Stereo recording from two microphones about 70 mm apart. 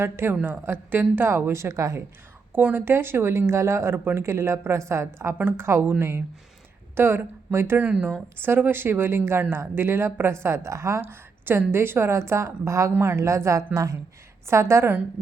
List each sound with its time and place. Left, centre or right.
0.0 s speech: right
2.5 s speech: right
7.8 s speech: centre
8.4 s a woman's voice: right
14.4 s speech: right